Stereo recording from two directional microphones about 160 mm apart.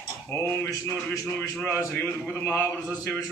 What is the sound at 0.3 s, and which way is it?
Speech, 15° left (ahead or behind).